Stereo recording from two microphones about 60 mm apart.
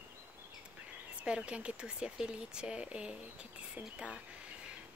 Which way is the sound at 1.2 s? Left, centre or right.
Centre.